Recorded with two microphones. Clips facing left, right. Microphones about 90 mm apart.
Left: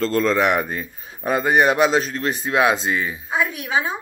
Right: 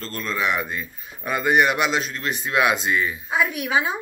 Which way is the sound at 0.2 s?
75° left (ahead or behind).